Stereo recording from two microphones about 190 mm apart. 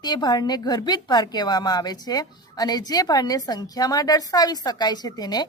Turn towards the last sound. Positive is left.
turn(degrees=20)  # may be behind; listen again after turning